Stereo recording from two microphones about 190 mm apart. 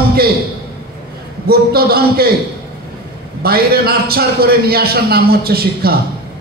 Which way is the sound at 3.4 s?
55° right (ahead or behind).